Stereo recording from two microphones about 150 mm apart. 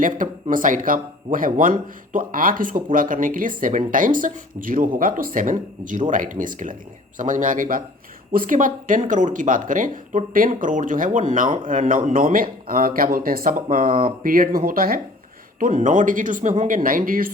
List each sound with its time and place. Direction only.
0.0 s speech: 60° right (ahead or behind)
15.5 s speech: 60° right (ahead or behind)